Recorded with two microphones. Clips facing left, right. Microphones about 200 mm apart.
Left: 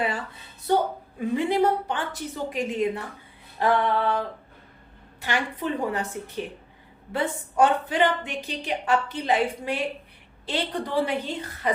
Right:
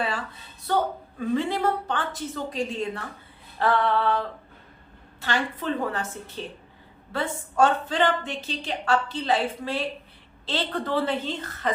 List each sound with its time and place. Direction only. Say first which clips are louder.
0.7 s a woman's voice: left 2 dB; 15° left (ahead or behind)
5.2 s a woman's voice: even; 15° left (ahead or behind)